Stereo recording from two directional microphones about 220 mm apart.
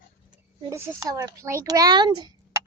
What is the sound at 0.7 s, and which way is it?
Speech, 15° right (ahead or behind).